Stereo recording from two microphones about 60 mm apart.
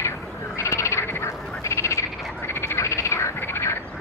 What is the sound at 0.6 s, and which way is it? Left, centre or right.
Frog, left.